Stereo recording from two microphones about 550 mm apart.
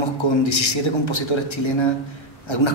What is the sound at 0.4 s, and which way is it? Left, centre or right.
A man's voice, left.